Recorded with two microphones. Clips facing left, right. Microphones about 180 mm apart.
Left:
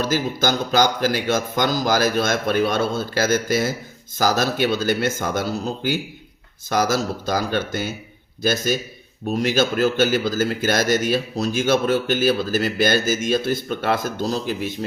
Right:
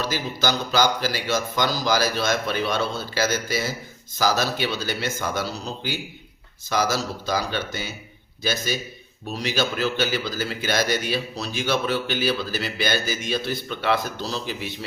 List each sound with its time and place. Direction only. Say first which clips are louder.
0.0 s a man's voice: left 4 dB; 50° left (ahead or behind)